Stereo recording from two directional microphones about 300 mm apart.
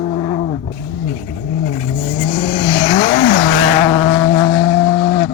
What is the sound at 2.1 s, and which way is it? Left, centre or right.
Vehicle, left.